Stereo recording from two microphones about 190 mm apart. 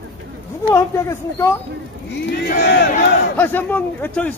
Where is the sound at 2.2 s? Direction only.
60° left (ahead or behind).